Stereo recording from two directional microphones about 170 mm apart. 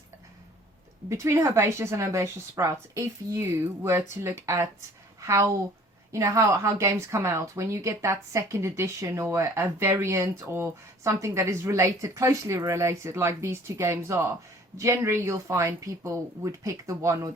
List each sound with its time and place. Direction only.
1.1 s a woman's voice: 15° right (ahead or behind)